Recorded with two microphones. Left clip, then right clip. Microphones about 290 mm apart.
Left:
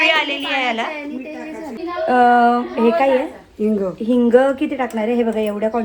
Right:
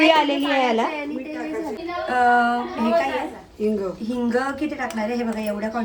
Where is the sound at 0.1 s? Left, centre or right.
Centre.